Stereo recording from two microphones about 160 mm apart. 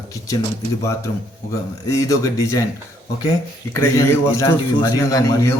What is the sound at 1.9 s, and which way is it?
A man's voice, 20° left (ahead or behind).